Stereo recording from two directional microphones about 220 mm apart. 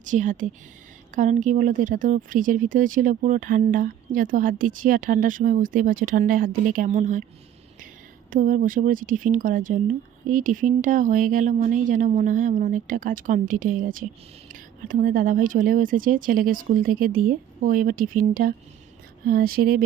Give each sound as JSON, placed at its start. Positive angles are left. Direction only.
{"t": 0.0, "sound": "speech", "side_deg": -35}
{"t": 8.3, "sound": "speech", "side_deg": -40}